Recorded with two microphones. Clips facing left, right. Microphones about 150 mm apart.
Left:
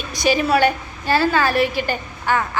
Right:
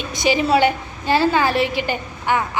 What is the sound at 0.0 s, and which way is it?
A woman's voice, 20° right (ahead or behind).